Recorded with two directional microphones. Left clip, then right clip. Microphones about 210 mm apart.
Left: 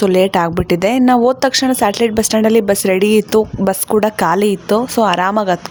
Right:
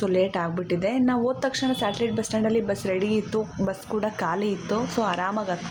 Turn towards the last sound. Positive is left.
turn(degrees=50)  # may be behind; listen again after turning